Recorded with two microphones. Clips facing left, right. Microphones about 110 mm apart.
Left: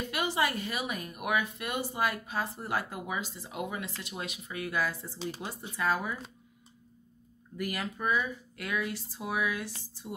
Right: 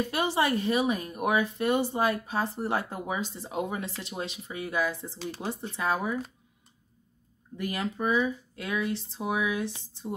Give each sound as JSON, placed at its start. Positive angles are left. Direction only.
{"t": 0.1, "sound": "speech", "side_deg": -35}
{"t": 7.5, "sound": "speech", "side_deg": -25}